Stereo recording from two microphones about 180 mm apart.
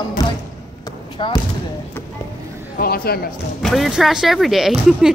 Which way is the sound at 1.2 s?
25° left (ahead or behind).